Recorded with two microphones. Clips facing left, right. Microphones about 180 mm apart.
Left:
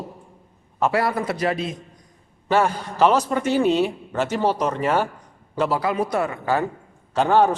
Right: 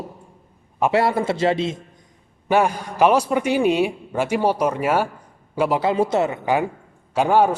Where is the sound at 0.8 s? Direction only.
25° right (ahead or behind).